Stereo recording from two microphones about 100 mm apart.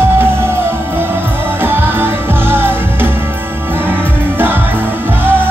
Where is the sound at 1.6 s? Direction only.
20° right (ahead or behind).